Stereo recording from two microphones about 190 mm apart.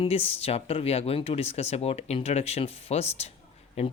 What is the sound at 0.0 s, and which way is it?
Speech, 30° left (ahead or behind).